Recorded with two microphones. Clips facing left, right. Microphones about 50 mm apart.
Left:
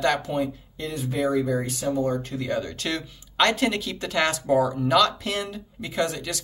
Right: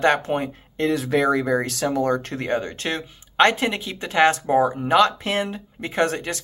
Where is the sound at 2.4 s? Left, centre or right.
Right.